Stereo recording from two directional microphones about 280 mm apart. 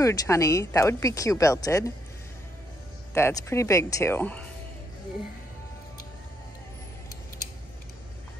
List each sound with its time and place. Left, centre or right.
0.0 s speech: centre
3.2 s speech: centre